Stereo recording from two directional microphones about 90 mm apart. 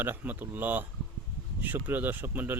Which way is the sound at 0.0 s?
20° right (ahead or behind).